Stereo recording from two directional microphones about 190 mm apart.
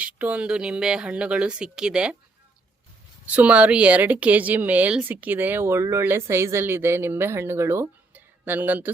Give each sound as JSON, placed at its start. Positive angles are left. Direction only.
{"t": 0.0, "sound": "speech", "side_deg": -5}
{"t": 3.3, "sound": "a woman's voice", "side_deg": -5}